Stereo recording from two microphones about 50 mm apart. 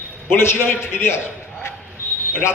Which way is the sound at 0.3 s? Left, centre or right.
Left.